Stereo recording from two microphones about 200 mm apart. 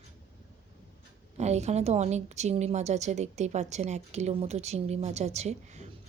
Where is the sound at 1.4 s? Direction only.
35° right (ahead or behind).